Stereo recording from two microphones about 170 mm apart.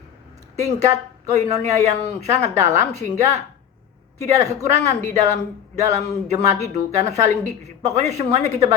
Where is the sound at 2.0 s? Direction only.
40° right (ahead or behind).